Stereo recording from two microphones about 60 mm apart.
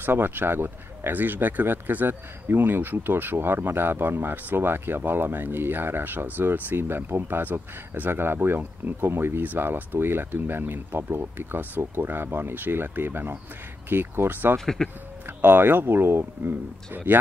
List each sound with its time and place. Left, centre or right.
0.0 s speech: right
14.6 s speech: centre
15.2 s speech: right